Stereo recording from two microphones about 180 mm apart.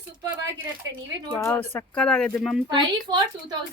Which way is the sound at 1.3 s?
15° left (ahead or behind).